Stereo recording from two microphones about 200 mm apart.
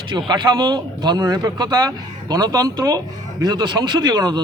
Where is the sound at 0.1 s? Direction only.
20° right (ahead or behind).